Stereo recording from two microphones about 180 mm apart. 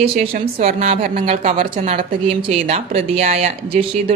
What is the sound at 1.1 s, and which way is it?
Speech, 35° right (ahead or behind).